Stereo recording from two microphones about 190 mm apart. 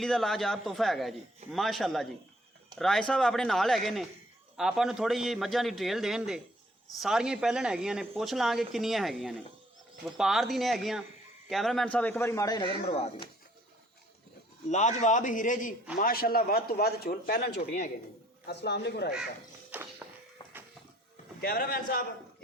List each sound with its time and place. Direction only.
0.0 s a man's voice: centre (ahead or behind); by 13.2 s 30° left (ahead or behind)
14.7 s a man's voice: 40° left (ahead or behind); by 19.1 s 60° left (ahead or behind)
19.7 s music: 5° right (ahead or behind)
20.4 s a sound: 25° left (ahead or behind)
21.4 s speech: 50° left (ahead or behind)